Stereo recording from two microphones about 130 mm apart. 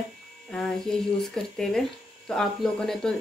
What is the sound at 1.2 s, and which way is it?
Speech, 5° left (ahead or behind).